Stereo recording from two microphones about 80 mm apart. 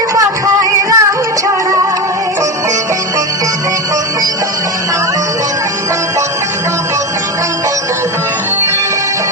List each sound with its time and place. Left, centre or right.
0.2 s music: right